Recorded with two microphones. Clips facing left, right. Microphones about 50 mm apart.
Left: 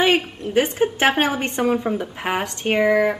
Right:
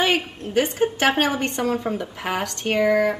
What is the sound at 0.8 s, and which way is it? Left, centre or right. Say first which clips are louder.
A woman's voice: left 1 dB; centre.